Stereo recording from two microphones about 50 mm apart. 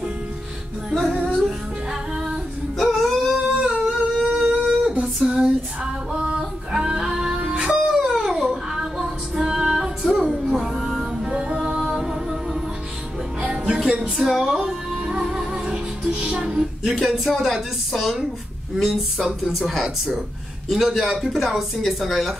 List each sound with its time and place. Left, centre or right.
1.2 s music: centre
2.8 s a sound: centre
3.8 s humming: centre
4.8 s female singing: centre
6.1 s music: centre
7.9 s a sound: centre
8.5 s music: centre
13.4 s music: centre
14.1 s music: centre
17.3 s speech: centre